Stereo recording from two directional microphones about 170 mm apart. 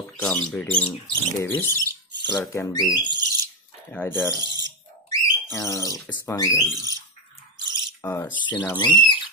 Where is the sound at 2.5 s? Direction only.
20° left (ahead or behind).